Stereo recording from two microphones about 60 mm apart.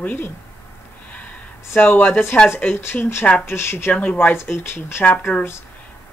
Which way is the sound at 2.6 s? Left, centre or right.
Left.